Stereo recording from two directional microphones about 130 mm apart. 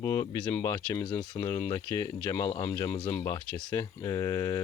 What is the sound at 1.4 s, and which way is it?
Speech, 20° left (ahead or behind).